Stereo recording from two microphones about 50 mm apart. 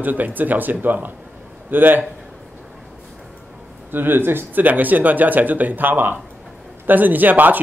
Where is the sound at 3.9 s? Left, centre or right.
Right.